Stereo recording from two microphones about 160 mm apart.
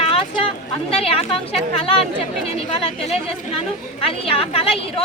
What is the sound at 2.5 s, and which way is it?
A woman's voice, 40° left (ahead or behind).